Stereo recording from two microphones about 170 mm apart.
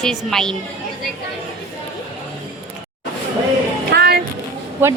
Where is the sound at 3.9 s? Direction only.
70° right (ahead or behind).